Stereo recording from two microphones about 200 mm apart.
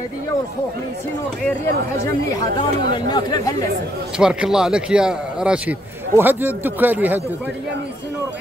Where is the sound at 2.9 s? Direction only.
20° left (ahead or behind).